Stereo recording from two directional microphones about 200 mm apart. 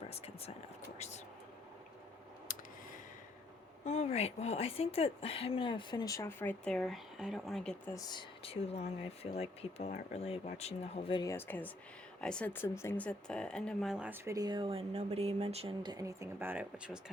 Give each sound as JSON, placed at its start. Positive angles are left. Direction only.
{"t": 0.1, "sound": "speech", "side_deg": 30}
{"t": 2.5, "sound": "a sound", "side_deg": 40}
{"t": 3.8, "sound": "speech", "side_deg": 35}
{"t": 7.9, "sound": "speech", "side_deg": 25}
{"t": 11.2, "sound": "speech", "side_deg": 15}